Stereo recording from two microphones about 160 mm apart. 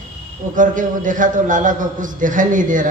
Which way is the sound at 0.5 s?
55° right (ahead or behind).